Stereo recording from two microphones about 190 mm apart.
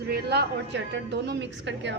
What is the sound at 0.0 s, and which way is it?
A woman's voice, 60° right (ahead or behind).